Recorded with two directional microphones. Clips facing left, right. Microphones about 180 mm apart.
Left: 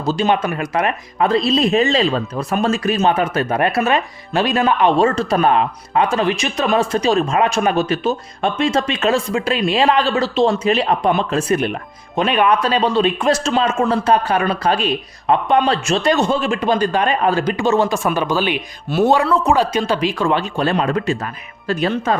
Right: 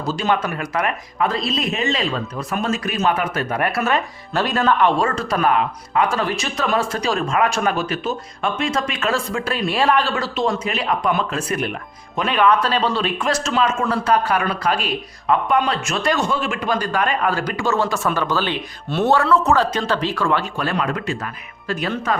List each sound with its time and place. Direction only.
0.0 s speech: 25° left (ahead or behind)